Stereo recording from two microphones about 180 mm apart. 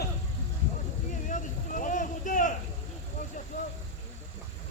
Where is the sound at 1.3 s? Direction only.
45° left (ahead or behind).